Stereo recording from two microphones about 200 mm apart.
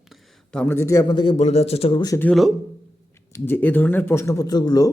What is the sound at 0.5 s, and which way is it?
A man's voice, 10° left (ahead or behind).